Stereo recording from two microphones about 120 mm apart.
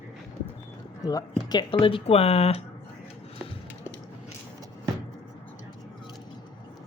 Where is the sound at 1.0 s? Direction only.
30° left (ahead or behind); by 2.6 s 60° left (ahead or behind).